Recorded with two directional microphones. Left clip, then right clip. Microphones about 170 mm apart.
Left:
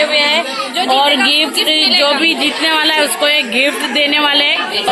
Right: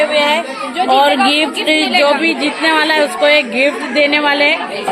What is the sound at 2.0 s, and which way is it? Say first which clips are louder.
A woman's voice: even; 10° right (ahead or behind).